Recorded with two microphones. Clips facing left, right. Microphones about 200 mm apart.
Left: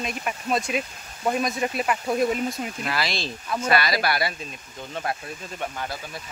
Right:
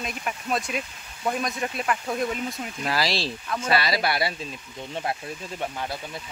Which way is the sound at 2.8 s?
35° right (ahead or behind).